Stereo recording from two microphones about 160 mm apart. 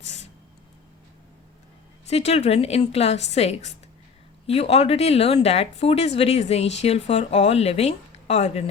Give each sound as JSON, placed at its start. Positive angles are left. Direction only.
{"t": 2.0, "sound": "speech", "side_deg": 40}